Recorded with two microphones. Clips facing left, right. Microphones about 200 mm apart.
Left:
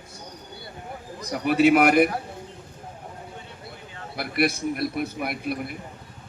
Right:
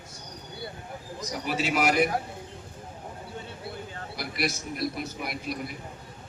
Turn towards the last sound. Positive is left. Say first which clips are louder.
# left 4 dB
turn(degrees=55)  # may be behind; listen again after turning